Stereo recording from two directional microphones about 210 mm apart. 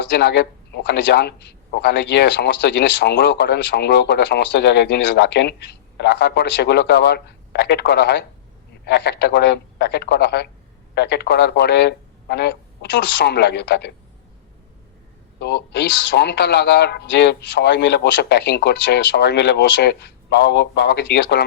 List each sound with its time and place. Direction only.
0.0 s a man's voice: 55° left (ahead or behind)
15.4 s a man's voice: 55° left (ahead or behind)